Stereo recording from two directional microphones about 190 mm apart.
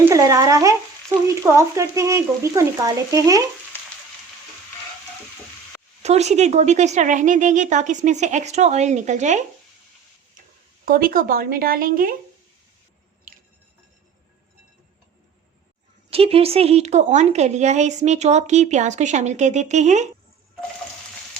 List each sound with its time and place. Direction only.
0.0 s speech: 15° right (ahead or behind)
6.0 s a woman's voice: 35° right (ahead or behind)
10.8 s speech: 50° right (ahead or behind)
16.0 s a woman's voice: 30° right (ahead or behind)